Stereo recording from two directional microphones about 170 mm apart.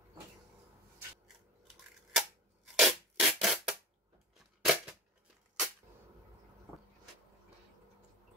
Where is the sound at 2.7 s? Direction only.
Centre (ahead or behind).